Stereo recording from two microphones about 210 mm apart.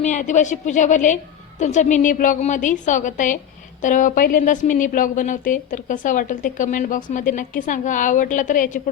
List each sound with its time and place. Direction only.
0.0 s a woman's voice: 35° left (ahead or behind)